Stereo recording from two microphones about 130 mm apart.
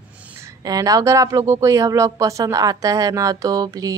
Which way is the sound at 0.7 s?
25° right (ahead or behind).